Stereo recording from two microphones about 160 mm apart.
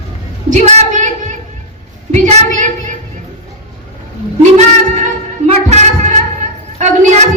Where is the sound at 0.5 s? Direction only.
45° right (ahead or behind).